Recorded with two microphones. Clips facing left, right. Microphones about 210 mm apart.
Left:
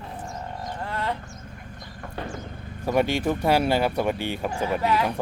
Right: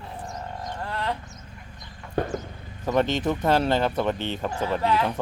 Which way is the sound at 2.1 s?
45° right (ahead or behind).